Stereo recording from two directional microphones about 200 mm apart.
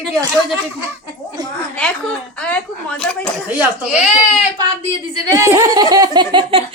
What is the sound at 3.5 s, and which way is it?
Speech, 5° right (ahead or behind).